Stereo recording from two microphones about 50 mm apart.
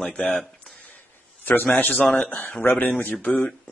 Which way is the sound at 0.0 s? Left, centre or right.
Left.